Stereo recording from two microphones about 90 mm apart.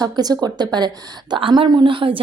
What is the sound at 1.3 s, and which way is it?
Speech, 65° right (ahead or behind).